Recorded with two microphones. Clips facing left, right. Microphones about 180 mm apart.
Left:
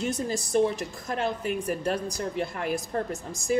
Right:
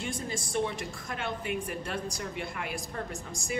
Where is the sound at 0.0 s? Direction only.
40° left (ahead or behind).